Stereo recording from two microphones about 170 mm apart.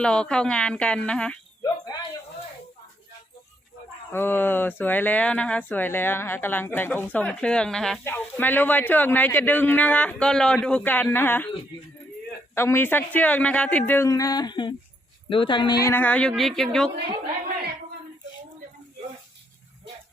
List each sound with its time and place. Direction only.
0.0 s speech: 5° left (ahead or behind)
1.6 s a sound: 25° left (ahead or behind)
4.1 s speech: 10° left (ahead or behind)
12.5 s speech: 15° left (ahead or behind)
15.9 s speech: 10° left (ahead or behind)